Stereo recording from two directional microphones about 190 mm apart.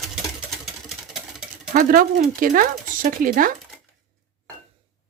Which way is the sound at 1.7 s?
45° right (ahead or behind).